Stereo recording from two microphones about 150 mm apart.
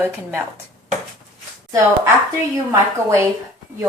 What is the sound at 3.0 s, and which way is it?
Speech, 20° right (ahead or behind).